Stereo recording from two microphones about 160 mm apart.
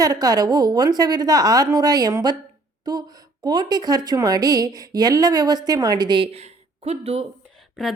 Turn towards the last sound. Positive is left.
turn(degrees=0)  # may be behind; listen again after turning